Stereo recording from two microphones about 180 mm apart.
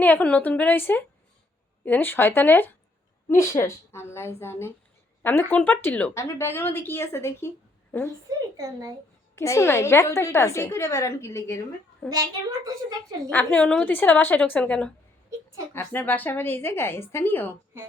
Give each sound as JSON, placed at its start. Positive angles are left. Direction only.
{"t": 0.0, "sound": "a woman's voice", "side_deg": 10}
{"t": 8.3, "sound": "speech", "side_deg": -20}
{"t": 9.3, "sound": "a woman's voice", "side_deg": 15}
{"t": 12.1, "sound": "a child's voice", "side_deg": -20}
{"t": 13.3, "sound": "a woman's voice", "side_deg": 5}